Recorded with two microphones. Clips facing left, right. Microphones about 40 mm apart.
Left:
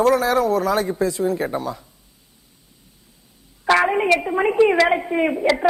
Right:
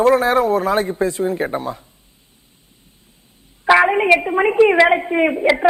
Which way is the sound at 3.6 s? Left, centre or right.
Centre.